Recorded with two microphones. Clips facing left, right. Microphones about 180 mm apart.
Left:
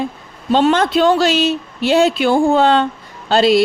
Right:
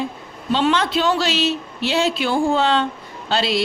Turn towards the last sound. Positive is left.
turn(degrees=45)  # may be behind; listen again after turning